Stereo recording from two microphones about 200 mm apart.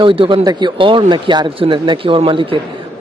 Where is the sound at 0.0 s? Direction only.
25° right (ahead or behind).